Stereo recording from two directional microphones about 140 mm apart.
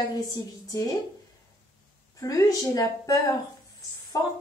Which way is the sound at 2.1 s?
25° left (ahead or behind).